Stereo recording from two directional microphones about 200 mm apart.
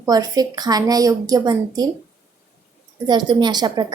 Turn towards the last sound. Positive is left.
turn(degrees=-20)  # may be behind; listen again after turning